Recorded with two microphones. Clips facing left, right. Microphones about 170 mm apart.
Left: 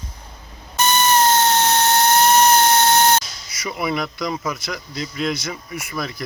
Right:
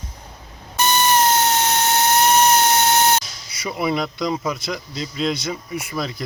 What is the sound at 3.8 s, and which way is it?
A man's voice, 30° right (ahead or behind).